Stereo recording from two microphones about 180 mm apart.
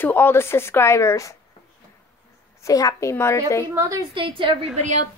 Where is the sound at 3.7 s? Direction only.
15° right (ahead or behind).